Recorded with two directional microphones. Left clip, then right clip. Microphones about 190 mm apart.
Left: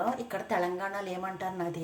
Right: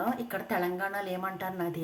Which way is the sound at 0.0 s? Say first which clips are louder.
Left 1 dB; 5° right (ahead or behind).